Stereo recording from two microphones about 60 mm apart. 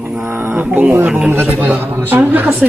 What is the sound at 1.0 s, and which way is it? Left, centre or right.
Speech, centre.